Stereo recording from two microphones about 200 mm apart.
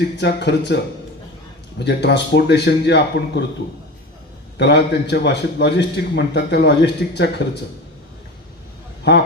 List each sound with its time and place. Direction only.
0.2 s a man's voice: 60° left (ahead or behind)
1.8 s a man's voice: 60° left (ahead or behind)
4.5 s a man's voice: 55° left (ahead or behind)